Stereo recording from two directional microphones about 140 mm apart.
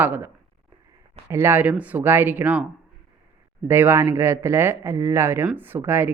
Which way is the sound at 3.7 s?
15° right (ahead or behind).